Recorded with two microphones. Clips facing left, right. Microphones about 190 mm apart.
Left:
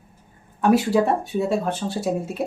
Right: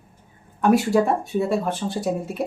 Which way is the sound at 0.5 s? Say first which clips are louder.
Even; centre (ahead or behind).